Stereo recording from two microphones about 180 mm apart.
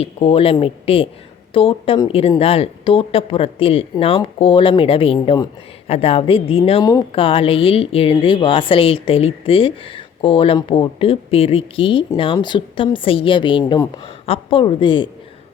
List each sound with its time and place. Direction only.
0.0 s speech: 35° left (ahead or behind)